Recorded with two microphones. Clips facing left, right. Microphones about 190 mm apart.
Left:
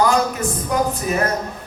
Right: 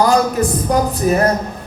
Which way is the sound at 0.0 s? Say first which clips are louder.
Right 4 dB; 35° right (ahead or behind).